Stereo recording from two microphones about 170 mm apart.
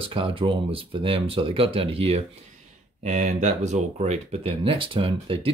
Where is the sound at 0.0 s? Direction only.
30° right (ahead or behind).